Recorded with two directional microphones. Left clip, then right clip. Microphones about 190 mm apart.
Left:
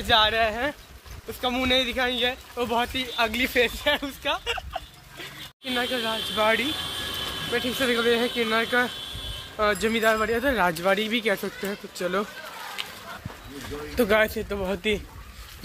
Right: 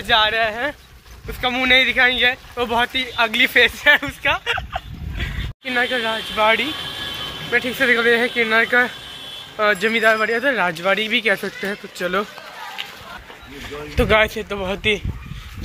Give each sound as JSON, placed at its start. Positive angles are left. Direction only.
{"t": 0.0, "sound": "speech", "side_deg": 5}
{"t": 6.3, "sound": "speech", "side_deg": 15}
{"t": 7.5, "sound": "speech", "side_deg": 5}
{"t": 11.3, "sound": "speech", "side_deg": 0}
{"t": 13.9, "sound": "speech", "side_deg": 15}